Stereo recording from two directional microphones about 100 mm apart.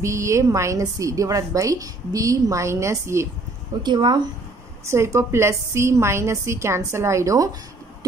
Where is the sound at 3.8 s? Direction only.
50° right (ahead or behind).